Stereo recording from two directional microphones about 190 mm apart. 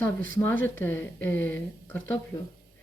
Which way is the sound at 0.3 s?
10° left (ahead or behind).